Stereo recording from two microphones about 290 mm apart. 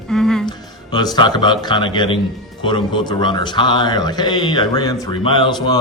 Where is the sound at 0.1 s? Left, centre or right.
Centre.